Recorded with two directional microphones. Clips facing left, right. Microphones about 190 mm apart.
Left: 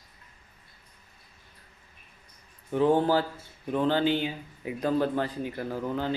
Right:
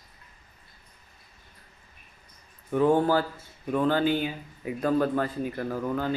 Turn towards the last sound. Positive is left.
turn(degrees=20)  # may be behind; listen again after turning